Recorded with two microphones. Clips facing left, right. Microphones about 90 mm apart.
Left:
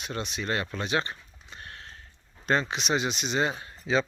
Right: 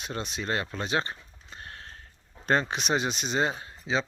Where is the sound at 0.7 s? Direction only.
35° right (ahead or behind).